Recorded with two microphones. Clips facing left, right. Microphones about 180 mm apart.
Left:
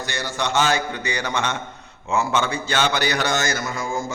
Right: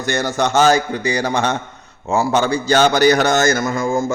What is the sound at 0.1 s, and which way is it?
A man's voice, 45° right (ahead or behind).